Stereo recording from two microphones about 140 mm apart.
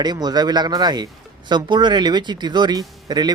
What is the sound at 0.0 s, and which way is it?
Speech, 30° right (ahead or behind).